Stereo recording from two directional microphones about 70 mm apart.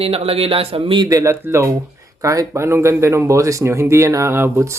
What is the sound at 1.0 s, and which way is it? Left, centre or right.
Speech, right.